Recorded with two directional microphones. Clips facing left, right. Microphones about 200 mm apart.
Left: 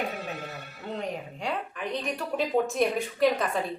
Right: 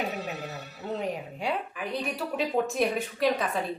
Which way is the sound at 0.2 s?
55° left (ahead or behind).